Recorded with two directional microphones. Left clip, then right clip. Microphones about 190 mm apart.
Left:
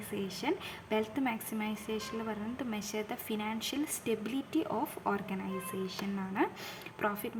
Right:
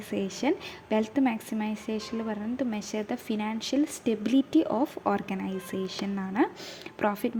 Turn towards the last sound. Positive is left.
turn(degrees=-25)  # may be behind; listen again after turning